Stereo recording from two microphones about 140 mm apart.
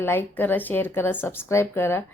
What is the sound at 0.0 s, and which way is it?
Speech, 15° left (ahead or behind).